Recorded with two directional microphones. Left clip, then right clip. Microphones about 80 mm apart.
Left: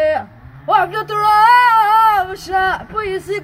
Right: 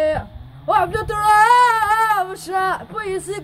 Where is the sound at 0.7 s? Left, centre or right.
Right.